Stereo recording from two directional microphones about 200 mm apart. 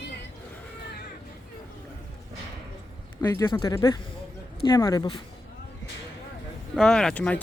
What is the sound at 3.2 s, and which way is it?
Speech, 15° left (ahead or behind).